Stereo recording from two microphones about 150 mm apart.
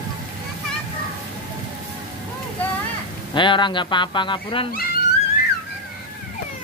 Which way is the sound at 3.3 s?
30° left (ahead or behind).